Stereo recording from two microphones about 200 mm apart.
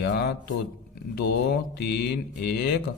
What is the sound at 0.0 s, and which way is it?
Speech, 55° left (ahead or behind).